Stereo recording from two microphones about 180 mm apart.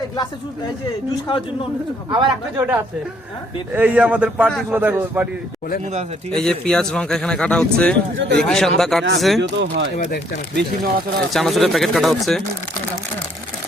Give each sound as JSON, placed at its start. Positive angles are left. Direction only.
{"t": 2.0, "sound": "speech", "side_deg": -25}
{"t": 2.6, "sound": "speech", "side_deg": -10}
{"t": 6.3, "sound": "speech", "side_deg": 5}
{"t": 9.4, "sound": "speech", "side_deg": -70}
{"t": 11.3, "sound": "speech", "side_deg": 0}